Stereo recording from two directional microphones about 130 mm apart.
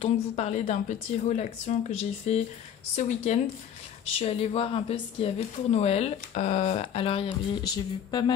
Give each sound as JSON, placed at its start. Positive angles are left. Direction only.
{"t": 0.0, "sound": "a woman's voice", "side_deg": 55}
{"t": 4.2, "sound": "speech", "side_deg": 50}
{"t": 7.6, "sound": "music", "side_deg": 35}